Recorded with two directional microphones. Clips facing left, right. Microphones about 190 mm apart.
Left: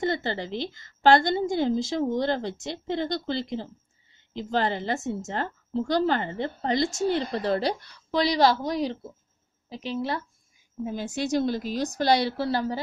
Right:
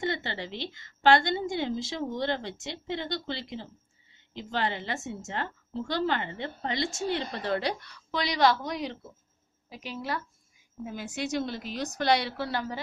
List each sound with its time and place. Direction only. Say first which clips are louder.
0.0 s a woman's voice: left 5 dB; 40° left (ahead or behind)